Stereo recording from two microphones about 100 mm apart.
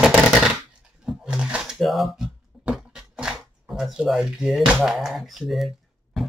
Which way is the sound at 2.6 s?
10° right (ahead or behind).